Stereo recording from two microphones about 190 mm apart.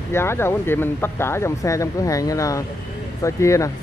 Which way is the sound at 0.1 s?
15° left (ahead or behind).